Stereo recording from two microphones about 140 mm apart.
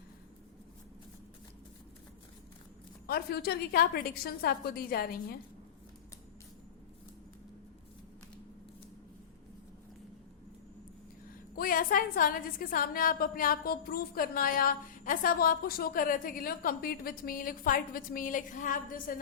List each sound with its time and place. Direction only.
3.1 s a woman's voice: 90° left
11.5 s a woman's voice: 85° left